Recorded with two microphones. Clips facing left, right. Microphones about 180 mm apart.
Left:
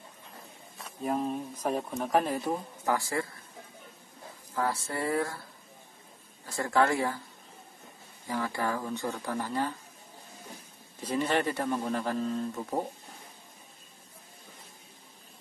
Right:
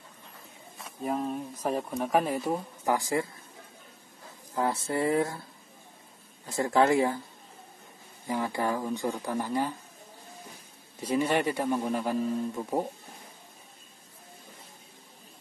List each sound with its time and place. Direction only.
0.7 s speech: centre (ahead or behind); by 3.3 s 15° right (ahead or behind)
4.6 s speech: 20° right (ahead or behind)
6.4 s speech: 20° right (ahead or behind)
8.3 s a man's voice: 15° right (ahead or behind)
11.0 s a man's voice: 10° right (ahead or behind)